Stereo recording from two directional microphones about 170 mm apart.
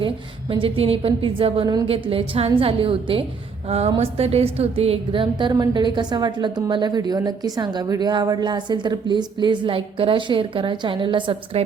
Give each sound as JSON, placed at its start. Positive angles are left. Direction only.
{"t": 0.0, "sound": "a woman's voice", "side_deg": -30}